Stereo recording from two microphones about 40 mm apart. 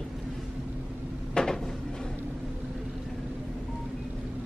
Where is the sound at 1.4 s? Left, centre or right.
Left.